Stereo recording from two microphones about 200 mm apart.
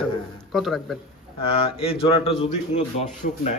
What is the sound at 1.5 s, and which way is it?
A man's voice, 30° left (ahead or behind).